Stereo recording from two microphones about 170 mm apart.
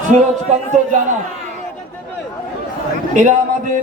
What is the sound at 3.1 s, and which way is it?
Speech, 45° right (ahead or behind).